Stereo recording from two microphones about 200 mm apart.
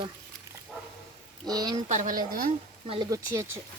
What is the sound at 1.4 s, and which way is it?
Speech, 20° right (ahead or behind).